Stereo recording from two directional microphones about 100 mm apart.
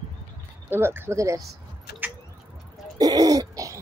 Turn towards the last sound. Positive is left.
turn(degrees=-35)  # may be behind; listen again after turning